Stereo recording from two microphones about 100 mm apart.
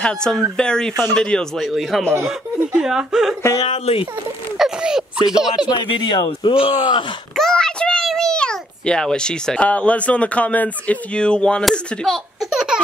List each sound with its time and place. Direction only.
0.0 s speech: 10° left (ahead or behind)
3.6 s a sound: 90° left
4.6 s a sound: 5° right (ahead or behind)
5.3 s speech: 5° right (ahead or behind)
5.9 s speech: 55° left (ahead or behind)
6.6 s speech: 90° left
7.3 s a child's voice: 5° left (ahead or behind)